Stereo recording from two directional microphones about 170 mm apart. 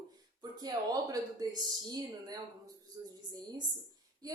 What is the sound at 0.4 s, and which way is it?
Speech, 25° right (ahead or behind).